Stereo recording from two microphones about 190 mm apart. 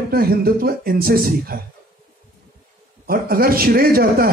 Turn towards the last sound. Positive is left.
turn(degrees=-50)  # may be behind; listen again after turning